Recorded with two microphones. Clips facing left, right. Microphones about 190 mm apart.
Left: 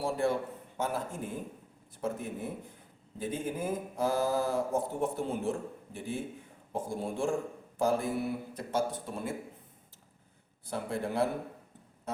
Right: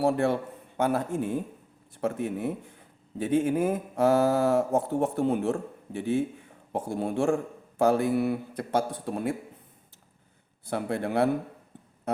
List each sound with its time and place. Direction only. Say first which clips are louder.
0.0 s speech: right 5 dB; 70° right (ahead or behind)
10.7 s speech: right 5 dB; 65° right (ahead or behind)